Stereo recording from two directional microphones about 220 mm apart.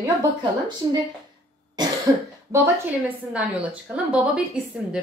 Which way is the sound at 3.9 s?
5° right (ahead or behind).